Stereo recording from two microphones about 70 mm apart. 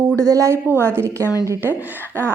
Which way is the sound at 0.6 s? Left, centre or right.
Right.